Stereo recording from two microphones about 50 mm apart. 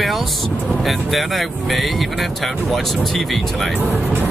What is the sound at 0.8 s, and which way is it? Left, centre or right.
Speech, centre.